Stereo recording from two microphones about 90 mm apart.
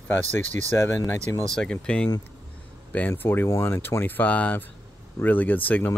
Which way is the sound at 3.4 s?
35° left (ahead or behind).